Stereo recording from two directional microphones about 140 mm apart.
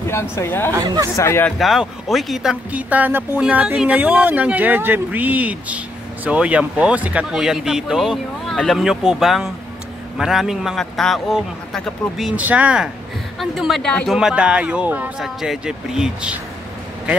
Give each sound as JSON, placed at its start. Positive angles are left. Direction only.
{"t": 0.0, "sound": "speech", "side_deg": 20}
{"t": 0.8, "sound": "speech", "side_deg": -30}
{"t": 1.1, "sound": "speech", "side_deg": 20}
{"t": 1.6, "sound": "speech", "side_deg": 0}
{"t": 14.1, "sound": "speech", "side_deg": -5}